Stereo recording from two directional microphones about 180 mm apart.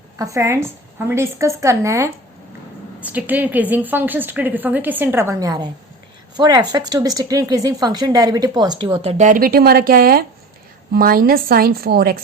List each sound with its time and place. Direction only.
0.2 s a woman's voice: 15° right (ahead or behind); by 12.1 s 55° right (ahead or behind)